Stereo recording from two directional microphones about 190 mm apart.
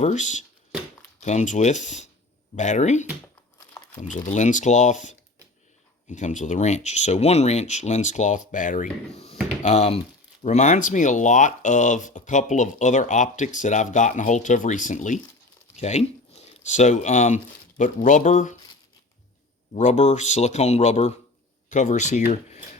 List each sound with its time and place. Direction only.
0.0 s speech: 40° left (ahead or behind)
19.7 s speech: 35° left (ahead or behind)